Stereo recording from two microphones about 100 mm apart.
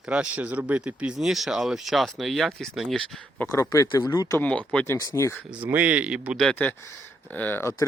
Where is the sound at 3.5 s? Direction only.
35° left (ahead or behind).